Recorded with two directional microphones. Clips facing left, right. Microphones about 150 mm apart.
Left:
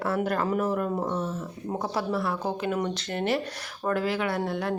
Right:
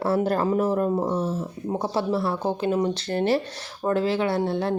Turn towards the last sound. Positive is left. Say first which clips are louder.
# right 4 dB
turn(degrees=-30)  # may be behind; listen again after turning